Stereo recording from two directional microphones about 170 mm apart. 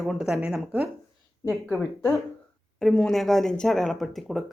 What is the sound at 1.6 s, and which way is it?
Speech, 15° left (ahead or behind).